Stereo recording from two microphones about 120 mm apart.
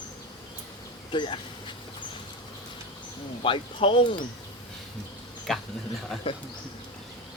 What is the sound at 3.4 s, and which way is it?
Speech, 50° left (ahead or behind).